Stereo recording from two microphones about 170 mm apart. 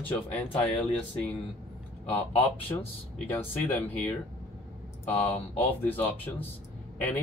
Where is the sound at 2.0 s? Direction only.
10° left (ahead or behind).